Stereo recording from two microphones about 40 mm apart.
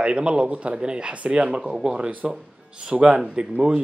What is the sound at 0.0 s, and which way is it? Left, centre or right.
A man's voice, right.